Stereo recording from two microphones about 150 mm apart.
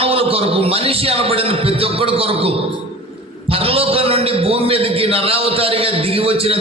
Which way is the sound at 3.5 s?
40° right (ahead or behind).